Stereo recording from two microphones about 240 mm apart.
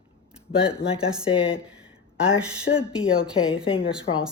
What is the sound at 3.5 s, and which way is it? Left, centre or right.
Speech, left.